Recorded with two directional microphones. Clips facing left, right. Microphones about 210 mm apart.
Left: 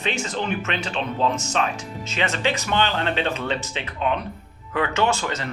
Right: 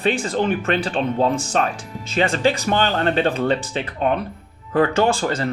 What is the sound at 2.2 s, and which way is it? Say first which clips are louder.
Speech: right 6 dB; 30° right (ahead or behind).